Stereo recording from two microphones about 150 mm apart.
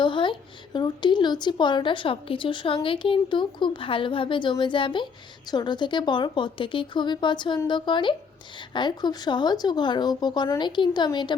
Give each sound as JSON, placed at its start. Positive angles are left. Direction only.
{"t": 0.0, "sound": "a woman's voice", "side_deg": 35}